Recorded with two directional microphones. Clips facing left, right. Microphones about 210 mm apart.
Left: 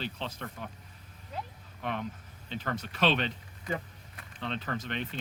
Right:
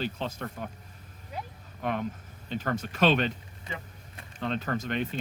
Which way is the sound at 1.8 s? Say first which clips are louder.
Right 4 dB; 45° right (ahead or behind).